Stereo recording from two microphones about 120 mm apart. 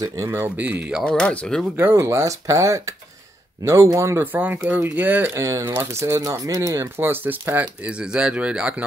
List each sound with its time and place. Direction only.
0.3 s speech: 15° right (ahead or behind)
1.0 s speech: 10° left (ahead or behind)
1.8 s speech: 20° right (ahead or behind)